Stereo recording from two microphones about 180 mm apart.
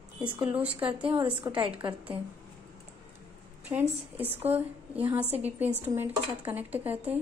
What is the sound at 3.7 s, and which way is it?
A woman's voice, 10° right (ahead or behind).